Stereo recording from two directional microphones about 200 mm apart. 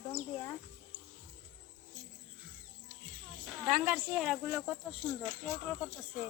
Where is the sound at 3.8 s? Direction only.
5° right (ahead or behind).